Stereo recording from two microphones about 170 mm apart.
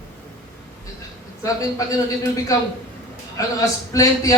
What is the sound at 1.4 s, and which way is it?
A woman's voice, 20° left (ahead or behind).